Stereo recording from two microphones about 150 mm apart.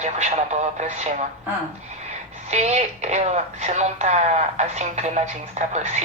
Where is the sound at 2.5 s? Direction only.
50° right (ahead or behind).